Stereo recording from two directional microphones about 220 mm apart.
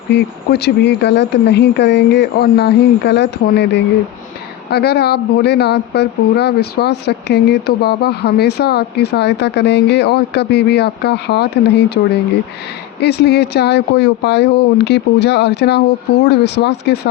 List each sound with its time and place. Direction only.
0.1 s speech: 50° left (ahead or behind)
13.0 s speech: 50° left (ahead or behind)